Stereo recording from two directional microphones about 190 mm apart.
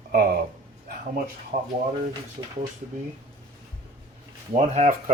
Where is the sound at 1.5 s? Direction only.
40° right (ahead or behind).